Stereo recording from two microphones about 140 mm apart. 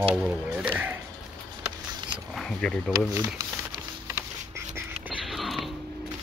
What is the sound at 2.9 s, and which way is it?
Speech, 25° right (ahead or behind).